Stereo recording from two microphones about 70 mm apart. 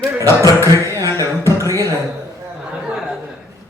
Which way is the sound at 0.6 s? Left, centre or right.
Right.